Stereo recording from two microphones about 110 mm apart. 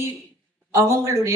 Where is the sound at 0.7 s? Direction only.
25° right (ahead or behind).